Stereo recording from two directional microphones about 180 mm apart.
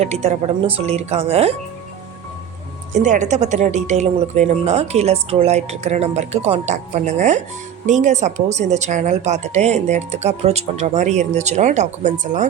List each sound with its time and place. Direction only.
0.0 s speech: 35° right (ahead or behind)
2.9 s speech: 40° right (ahead or behind)